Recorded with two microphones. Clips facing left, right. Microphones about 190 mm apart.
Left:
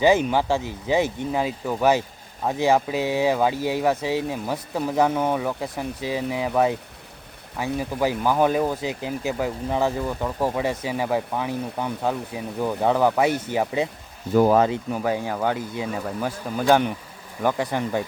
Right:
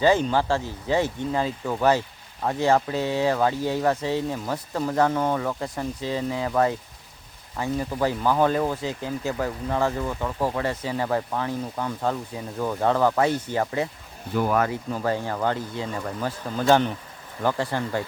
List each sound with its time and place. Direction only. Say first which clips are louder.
0.0 s speech: left 2 dB; 15° left (ahead or behind)
14.3 s speech: left 6 dB; 35° left (ahead or behind)
14.6 s speech: left 3 dB; 20° left (ahead or behind)